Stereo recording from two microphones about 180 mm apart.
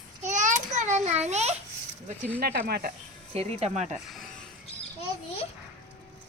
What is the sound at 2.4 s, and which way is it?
Speech, 60° right (ahead or behind).